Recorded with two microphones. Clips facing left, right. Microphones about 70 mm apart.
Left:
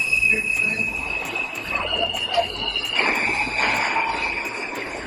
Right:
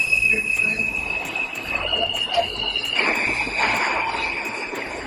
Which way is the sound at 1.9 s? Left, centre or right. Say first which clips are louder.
Right 2 dB; centre.